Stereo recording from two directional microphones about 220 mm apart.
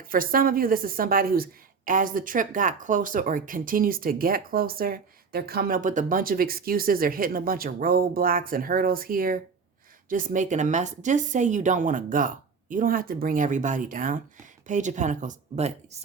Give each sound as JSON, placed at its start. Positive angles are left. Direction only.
{"t": 0.0, "sound": "a woman's voice", "side_deg": -40}